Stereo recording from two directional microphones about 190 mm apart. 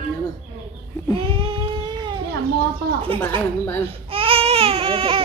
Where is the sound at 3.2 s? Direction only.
10° left (ahead or behind).